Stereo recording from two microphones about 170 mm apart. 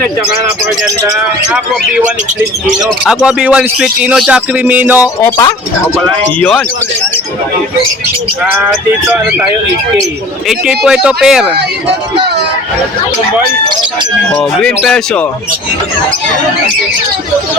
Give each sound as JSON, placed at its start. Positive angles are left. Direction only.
{"t": 3.0, "sound": "speech", "side_deg": -5}
{"t": 5.2, "sound": "speech", "side_deg": 20}
{"t": 8.7, "sound": "speech", "side_deg": -5}
{"t": 10.5, "sound": "speech", "side_deg": -5}
{"t": 14.6, "sound": "speech", "side_deg": 5}